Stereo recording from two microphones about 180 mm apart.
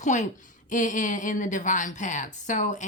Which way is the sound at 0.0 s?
40° left (ahead or behind).